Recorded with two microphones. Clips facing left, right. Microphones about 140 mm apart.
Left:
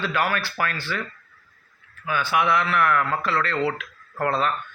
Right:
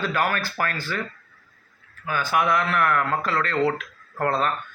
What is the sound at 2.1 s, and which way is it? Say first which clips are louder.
Speech: even; 40° right (ahead or behind).